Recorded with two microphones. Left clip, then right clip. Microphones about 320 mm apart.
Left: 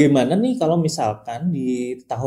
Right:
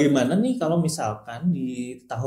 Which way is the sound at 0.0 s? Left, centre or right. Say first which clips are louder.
Left 4 dB; left.